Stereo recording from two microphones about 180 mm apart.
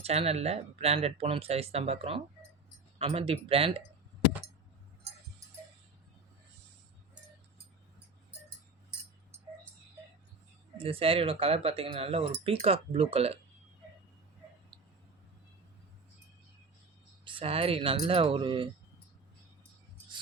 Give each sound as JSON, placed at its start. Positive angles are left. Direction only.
{"t": 0.0, "sound": "speech", "side_deg": -35}
{"t": 10.8, "sound": "speech", "side_deg": -30}
{"t": 17.2, "sound": "speech", "side_deg": -30}